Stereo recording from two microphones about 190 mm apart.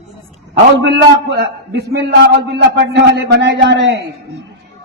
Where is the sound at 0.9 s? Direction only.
60° right (ahead or behind).